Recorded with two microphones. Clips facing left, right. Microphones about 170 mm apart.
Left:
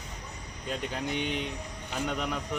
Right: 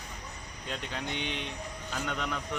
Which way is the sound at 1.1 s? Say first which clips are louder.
Left 6 dB; 45° left (ahead or behind).